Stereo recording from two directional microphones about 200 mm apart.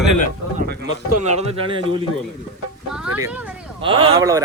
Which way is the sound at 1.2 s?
30° right (ahead or behind).